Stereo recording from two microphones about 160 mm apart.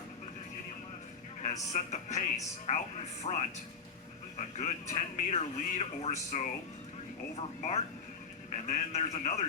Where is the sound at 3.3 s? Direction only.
40° left (ahead or behind).